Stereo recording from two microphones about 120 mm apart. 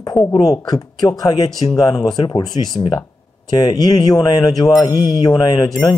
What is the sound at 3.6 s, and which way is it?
Speech, 35° left (ahead or behind).